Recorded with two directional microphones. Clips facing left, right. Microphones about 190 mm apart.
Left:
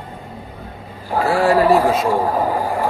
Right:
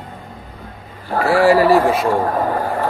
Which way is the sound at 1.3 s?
5° right (ahead or behind).